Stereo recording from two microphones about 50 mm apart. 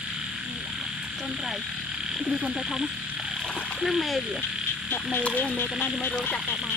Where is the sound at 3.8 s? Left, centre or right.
Centre.